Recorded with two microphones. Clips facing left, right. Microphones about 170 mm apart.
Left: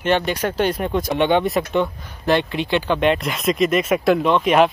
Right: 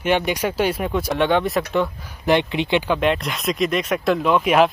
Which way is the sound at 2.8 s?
Centre (ahead or behind).